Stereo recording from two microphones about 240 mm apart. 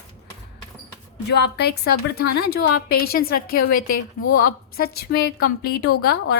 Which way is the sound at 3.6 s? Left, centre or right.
Left.